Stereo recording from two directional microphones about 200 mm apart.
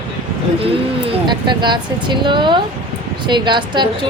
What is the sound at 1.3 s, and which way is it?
A woman's voice, 20° right (ahead or behind).